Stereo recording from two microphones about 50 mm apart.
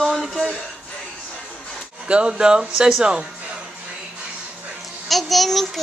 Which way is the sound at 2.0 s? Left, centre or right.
Centre.